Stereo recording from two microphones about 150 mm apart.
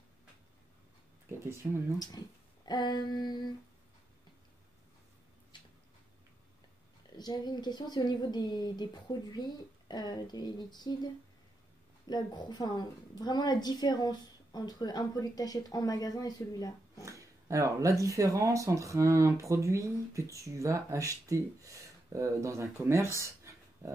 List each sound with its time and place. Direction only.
1.4 s speech: 15° right (ahead or behind)
2.0 s a woman's voice: 25° left (ahead or behind)
7.2 s a woman's voice: 30° left (ahead or behind)
12.1 s a woman's voice: 30° left (ahead or behind)
17.0 s speech: 20° right (ahead or behind)
23.1 s a sound: 20° right (ahead or behind)